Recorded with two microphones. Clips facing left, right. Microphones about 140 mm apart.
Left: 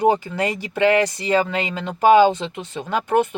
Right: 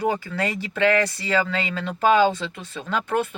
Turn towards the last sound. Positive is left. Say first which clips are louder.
# left 5 dB
turn(degrees=15)  # may be behind; listen again after turning